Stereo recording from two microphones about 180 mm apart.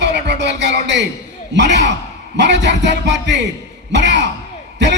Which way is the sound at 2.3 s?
75° right (ahead or behind).